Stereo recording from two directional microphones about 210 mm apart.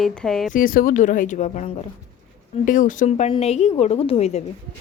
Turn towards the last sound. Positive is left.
turn(degrees=30)  # may be behind; listen again after turning